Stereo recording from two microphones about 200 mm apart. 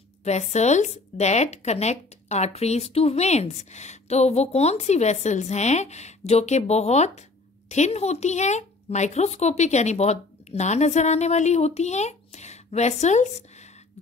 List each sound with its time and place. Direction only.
0.2 s a woman's voice: 35° left (ahead or behind)